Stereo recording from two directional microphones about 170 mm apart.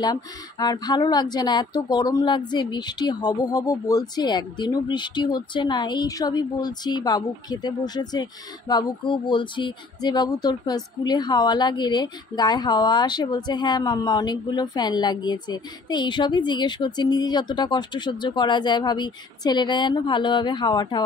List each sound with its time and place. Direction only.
0.0 s speech: 25° left (ahead or behind)